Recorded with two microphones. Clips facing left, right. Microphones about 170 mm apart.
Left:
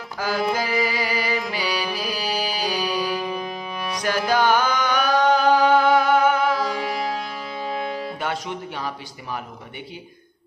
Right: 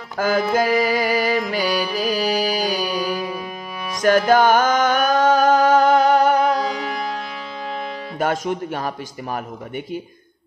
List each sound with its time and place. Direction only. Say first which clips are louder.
0.2 s a man's voice: right 6 dB; 50° right (ahead or behind)
0.6 s music: right 6 dB; 50° right (ahead or behind)
2.8 s music: right 1 dB; 10° right (ahead or behind)
4.0 s music: right 7 dB; 50° right (ahead or behind)
8.2 s a man's voice: right 6 dB; 45° right (ahead or behind)